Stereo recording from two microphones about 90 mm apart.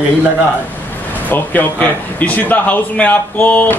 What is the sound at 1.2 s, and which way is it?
A man's voice, 20° left (ahead or behind).